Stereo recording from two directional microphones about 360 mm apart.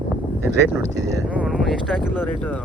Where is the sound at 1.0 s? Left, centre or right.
Centre.